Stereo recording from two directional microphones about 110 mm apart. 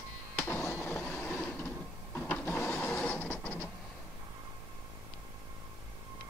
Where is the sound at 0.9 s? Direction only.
10° left (ahead or behind).